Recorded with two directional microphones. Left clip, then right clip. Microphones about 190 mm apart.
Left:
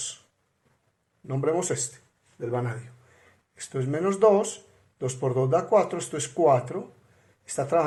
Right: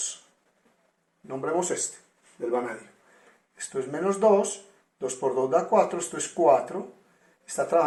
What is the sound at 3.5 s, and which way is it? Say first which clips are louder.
Speech: left 1 dB; 55° left (ahead or behind).